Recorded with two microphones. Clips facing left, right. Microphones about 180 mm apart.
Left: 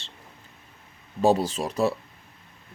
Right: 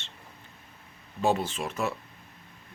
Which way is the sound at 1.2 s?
35° left (ahead or behind).